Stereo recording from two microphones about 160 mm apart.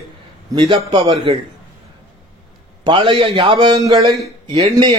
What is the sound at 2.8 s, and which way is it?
A man's voice, 30° right (ahead or behind).